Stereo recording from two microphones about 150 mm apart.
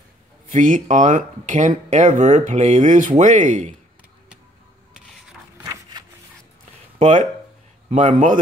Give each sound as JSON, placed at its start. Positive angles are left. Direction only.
{"t": 0.5, "sound": "speech", "side_deg": -60}
{"t": 5.6, "sound": "a sound", "side_deg": -25}
{"t": 7.0, "sound": "speech", "side_deg": -55}